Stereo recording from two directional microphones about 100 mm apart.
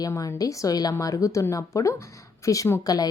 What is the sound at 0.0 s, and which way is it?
Speech, 35° left (ahead or behind).